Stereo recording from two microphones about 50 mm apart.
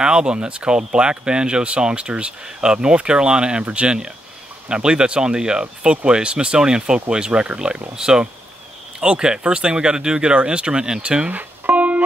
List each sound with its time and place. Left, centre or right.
0.0 s speech: centre
11.3 s music: right